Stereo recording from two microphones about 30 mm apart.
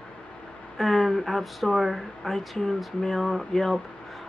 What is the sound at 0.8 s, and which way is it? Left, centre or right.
Speech, centre.